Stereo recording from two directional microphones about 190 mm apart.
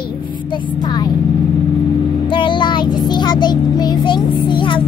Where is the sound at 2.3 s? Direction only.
25° left (ahead or behind).